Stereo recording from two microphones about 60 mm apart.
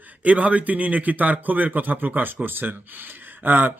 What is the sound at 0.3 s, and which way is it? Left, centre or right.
A man's voice, right.